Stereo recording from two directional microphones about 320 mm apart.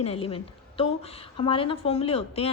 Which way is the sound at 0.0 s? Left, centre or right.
Centre.